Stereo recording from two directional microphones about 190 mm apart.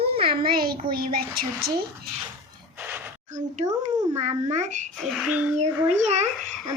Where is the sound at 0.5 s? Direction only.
50° right (ahead or behind).